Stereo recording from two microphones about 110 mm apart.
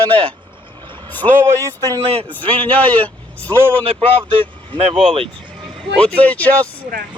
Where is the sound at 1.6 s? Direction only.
35° right (ahead or behind).